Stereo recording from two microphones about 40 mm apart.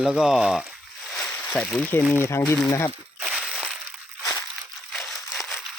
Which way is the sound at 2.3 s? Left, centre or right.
Left.